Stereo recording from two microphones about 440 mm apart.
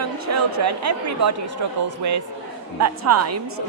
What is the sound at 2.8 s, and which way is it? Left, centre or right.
Speech, right.